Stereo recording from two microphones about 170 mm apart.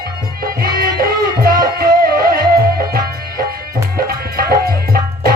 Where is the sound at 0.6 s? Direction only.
60° right (ahead or behind).